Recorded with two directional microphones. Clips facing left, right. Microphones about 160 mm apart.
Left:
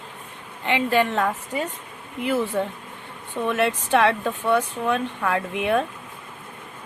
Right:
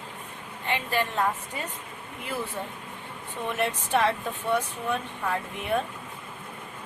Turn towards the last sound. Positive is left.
turn(degrees=80)